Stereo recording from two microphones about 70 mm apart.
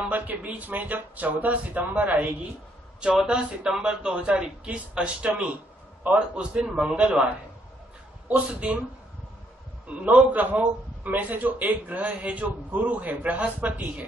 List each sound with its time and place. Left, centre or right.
0.1 s a man's voice: right
3.3 s a man's voice: centre
8.3 s a man's voice: centre
9.8 s a man's voice: centre